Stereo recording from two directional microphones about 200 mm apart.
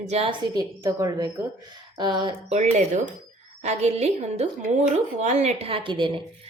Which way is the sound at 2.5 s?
35° right (ahead or behind).